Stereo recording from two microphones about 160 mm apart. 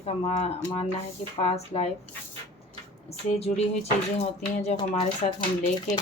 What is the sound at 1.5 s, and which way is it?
Speech, 40° left (ahead or behind).